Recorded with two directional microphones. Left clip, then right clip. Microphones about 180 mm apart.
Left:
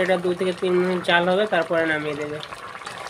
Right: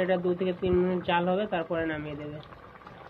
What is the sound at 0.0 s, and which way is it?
Speech, 25° left (ahead or behind).